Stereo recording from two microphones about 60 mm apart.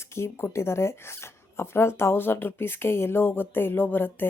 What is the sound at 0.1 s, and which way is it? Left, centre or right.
A woman's voice, left.